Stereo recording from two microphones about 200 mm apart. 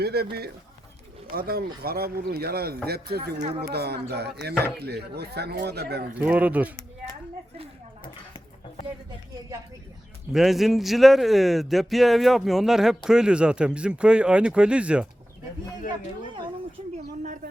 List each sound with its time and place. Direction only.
0.0 s speech: 50° right (ahead or behind)
6.1 s speech: 5° right (ahead or behind)
10.3 s speech: centre (ahead or behind)